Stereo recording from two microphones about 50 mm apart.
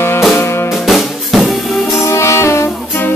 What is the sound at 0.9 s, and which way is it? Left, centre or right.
Music, centre.